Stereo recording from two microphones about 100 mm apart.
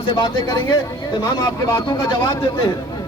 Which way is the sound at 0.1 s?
55° left (ahead or behind).